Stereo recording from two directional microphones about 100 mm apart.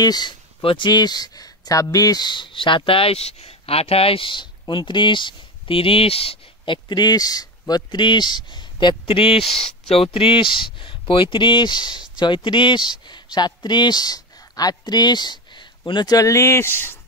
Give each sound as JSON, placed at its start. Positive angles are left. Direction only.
{"t": 0.0, "sound": "speech", "side_deg": 45}